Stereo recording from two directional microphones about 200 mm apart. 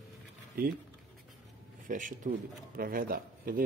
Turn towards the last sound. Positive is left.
turn(degrees=-45)  # may be behind; listen again after turning